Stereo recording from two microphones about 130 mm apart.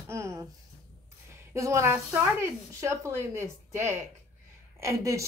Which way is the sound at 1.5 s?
20° right (ahead or behind).